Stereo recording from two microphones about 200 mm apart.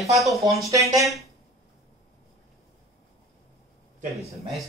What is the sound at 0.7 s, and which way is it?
Speech, 15° right (ahead or behind).